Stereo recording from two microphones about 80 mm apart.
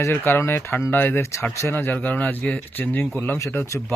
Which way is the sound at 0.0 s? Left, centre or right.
Left.